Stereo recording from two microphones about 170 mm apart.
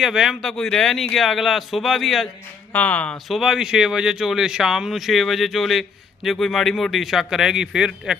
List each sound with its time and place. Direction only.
0.0 s speech: 5° right (ahead or behind)